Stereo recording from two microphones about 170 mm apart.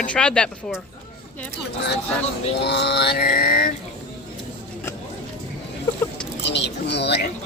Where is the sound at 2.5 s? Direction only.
75° left (ahead or behind); by 3.7 s 60° left (ahead or behind).